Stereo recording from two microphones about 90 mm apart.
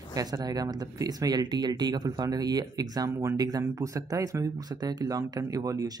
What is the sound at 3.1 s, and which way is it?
Speech, 30° right (ahead or behind).